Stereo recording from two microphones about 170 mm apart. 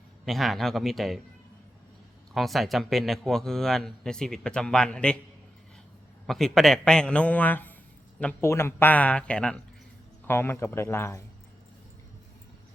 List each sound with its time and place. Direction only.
0.3 s a man's voice: centre (ahead or behind)
2.3 s a man's voice: centre (ahead or behind)
6.2 s a man's voice: centre (ahead or behind)